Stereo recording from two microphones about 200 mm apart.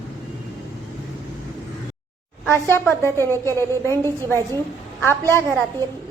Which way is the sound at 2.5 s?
10° left (ahead or behind).